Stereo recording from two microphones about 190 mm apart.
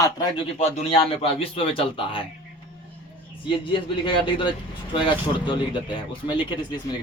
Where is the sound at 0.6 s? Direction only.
30° left (ahead or behind).